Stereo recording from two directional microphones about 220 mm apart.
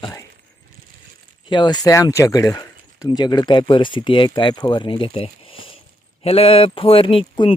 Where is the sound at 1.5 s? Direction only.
20° left (ahead or behind).